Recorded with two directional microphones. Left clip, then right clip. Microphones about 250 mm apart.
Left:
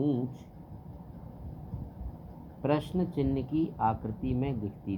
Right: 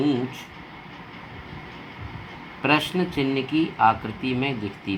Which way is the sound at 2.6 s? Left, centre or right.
Right.